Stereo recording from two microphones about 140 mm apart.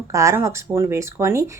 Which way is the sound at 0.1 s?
20° right (ahead or behind).